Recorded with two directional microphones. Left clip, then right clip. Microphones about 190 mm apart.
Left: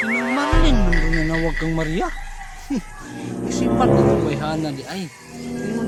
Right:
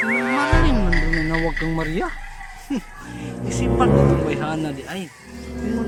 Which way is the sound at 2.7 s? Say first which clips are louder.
Left 1 dB; centre (ahead or behind).